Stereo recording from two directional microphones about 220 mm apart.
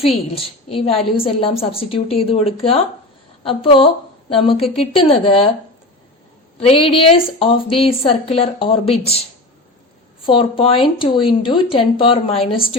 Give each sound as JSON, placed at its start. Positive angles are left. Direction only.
{"t": 0.0, "sound": "a woman's voice", "side_deg": 25}
{"t": 6.6, "sound": "a woman's voice", "side_deg": 25}
{"t": 10.2, "sound": "a woman's voice", "side_deg": 25}